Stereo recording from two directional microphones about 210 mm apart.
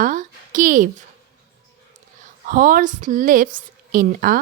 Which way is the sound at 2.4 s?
40° right (ahead or behind).